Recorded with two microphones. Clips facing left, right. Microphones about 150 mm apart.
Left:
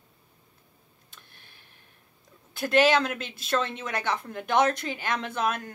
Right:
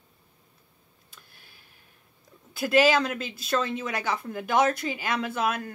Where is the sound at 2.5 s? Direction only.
5° right (ahead or behind).